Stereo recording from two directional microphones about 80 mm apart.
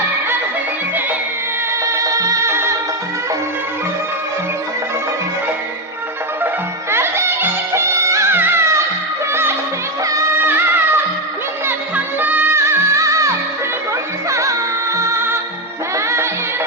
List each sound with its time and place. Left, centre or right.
1.8 s music: right
6.9 s music: right
8.3 s music: right
12.5 s music: right